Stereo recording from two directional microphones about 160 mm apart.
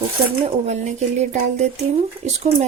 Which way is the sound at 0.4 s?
45° right (ahead or behind).